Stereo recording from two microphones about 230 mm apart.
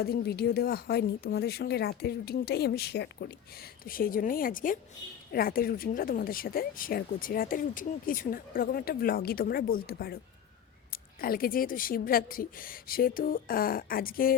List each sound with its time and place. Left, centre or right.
0.0 s speech: left